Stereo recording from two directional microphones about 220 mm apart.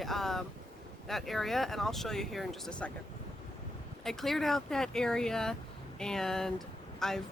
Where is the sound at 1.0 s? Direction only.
Centre (ahead or behind).